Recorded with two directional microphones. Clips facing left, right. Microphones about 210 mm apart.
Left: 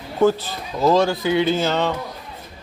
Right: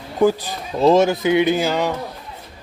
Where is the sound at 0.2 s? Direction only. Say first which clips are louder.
Right 1 dB; 15° right (ahead or behind).